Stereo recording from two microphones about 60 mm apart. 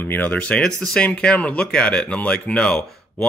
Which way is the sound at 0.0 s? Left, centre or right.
Left.